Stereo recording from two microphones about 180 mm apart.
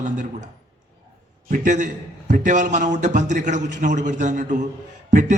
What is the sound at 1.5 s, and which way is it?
A man's voice, 45° right (ahead or behind).